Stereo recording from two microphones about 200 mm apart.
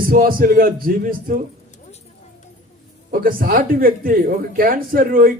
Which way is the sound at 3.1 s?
45° right (ahead or behind).